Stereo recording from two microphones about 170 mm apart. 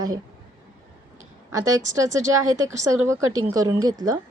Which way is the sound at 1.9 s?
20° right (ahead or behind).